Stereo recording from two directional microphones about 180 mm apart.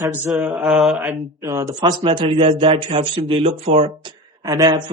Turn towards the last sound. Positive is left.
turn(degrees=-25)  # may be behind; listen again after turning